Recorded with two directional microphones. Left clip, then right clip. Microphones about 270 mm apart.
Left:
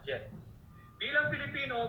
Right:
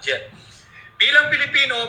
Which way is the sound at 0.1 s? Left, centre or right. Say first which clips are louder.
Right 13 dB; right.